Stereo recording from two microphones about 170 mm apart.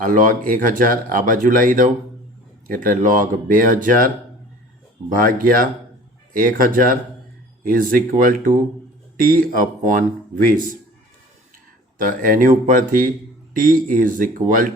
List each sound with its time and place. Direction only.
0.0 s speech: 50° right (ahead or behind)
11.9 s speech: 55° right (ahead or behind)